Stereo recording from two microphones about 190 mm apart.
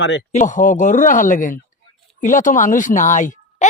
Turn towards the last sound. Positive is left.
turn(degrees=40)  # may be behind; listen again after turning